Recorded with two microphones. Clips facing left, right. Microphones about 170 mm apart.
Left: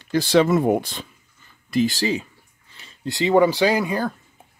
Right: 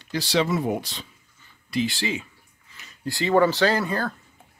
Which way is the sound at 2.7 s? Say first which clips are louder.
Left 4 dB; 25° left (ahead or behind).